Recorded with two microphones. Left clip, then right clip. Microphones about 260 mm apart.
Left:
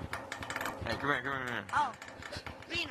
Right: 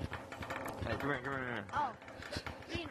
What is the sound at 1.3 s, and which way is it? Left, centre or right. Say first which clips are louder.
Speech: left 3 dB; left.